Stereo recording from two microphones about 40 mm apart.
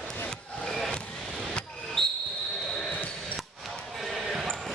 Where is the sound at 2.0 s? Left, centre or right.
Centre.